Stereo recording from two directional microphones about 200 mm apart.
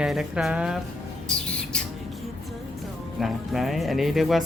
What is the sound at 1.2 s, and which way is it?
Bird, 5° left (ahead or behind).